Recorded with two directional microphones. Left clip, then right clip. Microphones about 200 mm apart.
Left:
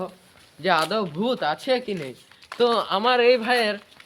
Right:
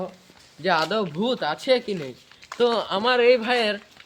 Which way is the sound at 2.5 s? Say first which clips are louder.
Left 1 dB; 5° right (ahead or behind).